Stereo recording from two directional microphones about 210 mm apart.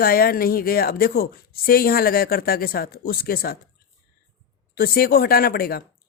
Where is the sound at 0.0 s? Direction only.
45° left (ahead or behind).